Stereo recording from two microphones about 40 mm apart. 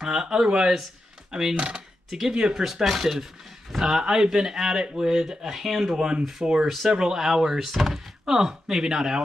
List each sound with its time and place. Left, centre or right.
0.0 s speech: centre
2.6 s speech: centre
6.9 s speech: centre